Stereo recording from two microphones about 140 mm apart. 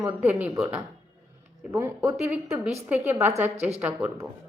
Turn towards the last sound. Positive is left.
turn(degrees=-10)  # may be behind; listen again after turning